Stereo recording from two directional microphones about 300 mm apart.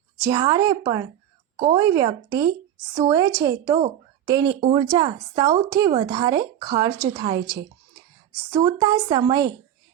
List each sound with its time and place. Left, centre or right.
0.2 s speech: centre